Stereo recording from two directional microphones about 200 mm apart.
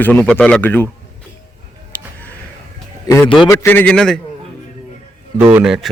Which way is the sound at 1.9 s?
10° left (ahead or behind).